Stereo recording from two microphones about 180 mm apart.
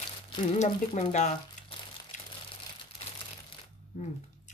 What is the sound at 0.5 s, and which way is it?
Speech, 40° left (ahead or behind).